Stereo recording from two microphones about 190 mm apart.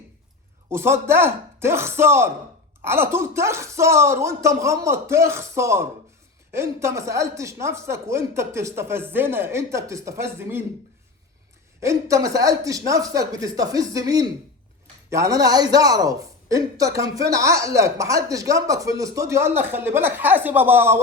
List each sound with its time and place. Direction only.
0.7 s a woman's voice: 15° right (ahead or behind)
11.8 s a woman's voice: 15° right (ahead or behind)